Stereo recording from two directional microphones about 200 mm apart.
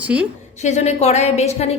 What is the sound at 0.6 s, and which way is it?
A woman's voice, 35° left (ahead or behind).